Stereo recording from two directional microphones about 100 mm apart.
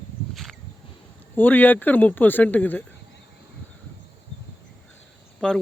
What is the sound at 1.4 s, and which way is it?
Speech, 20° left (ahead or behind).